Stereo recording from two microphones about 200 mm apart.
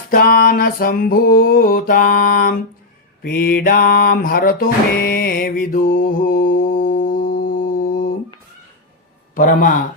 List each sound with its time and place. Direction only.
0.1 s music: 45° left (ahead or behind)
9.3 s speech: 40° left (ahead or behind)